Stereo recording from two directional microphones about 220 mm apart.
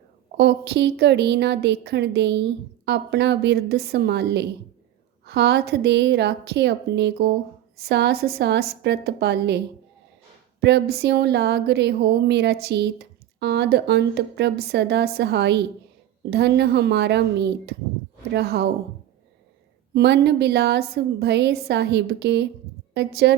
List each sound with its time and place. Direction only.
0.3 s speech: 50° right (ahead or behind)
10.6 s speech: 50° right (ahead or behind)
19.9 s speech: 50° right (ahead or behind)